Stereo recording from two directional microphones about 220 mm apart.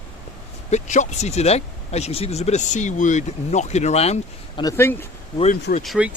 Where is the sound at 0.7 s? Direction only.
30° left (ahead or behind).